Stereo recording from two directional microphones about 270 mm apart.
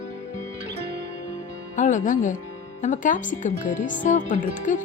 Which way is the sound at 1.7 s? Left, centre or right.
Left.